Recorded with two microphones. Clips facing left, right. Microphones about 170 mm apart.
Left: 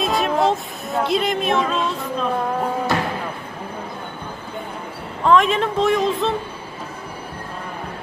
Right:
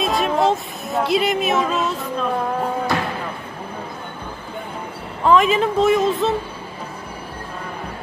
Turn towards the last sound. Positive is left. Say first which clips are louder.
# right 2 dB
turn(degrees=0)  # may be behind; listen again after turning